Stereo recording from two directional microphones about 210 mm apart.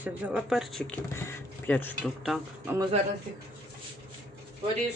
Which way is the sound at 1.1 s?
10° left (ahead or behind).